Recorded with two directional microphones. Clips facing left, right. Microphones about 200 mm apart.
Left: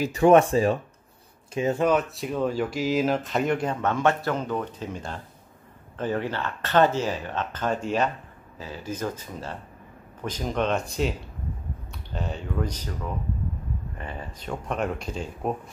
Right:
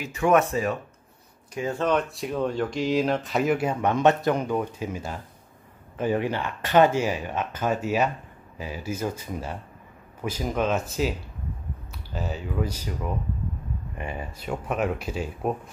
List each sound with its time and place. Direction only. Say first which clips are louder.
0.0 s speech: left 4 dB; 35° left (ahead or behind)
1.9 s speech: left 1 dB; 5° left (ahead or behind)